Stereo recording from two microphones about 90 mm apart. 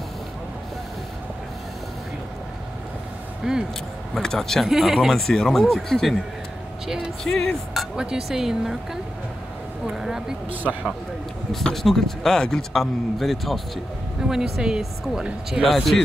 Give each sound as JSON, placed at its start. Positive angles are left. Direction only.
{"t": 3.4, "sound": "speech", "side_deg": -10}
{"t": 4.1, "sound": "a man's voice", "side_deg": 5}
{"t": 9.8, "sound": "a sound", "side_deg": -5}
{"t": 10.5, "sound": "speech", "side_deg": -20}
{"t": 11.5, "sound": "a man's voice", "side_deg": 5}